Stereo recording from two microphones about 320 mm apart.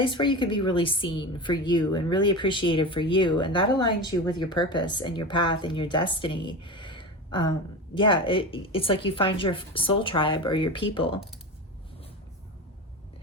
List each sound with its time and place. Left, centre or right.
0.0 s speech: centre